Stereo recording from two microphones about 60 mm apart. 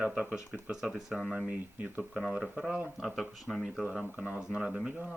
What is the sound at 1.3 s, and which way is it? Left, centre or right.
Speech, centre.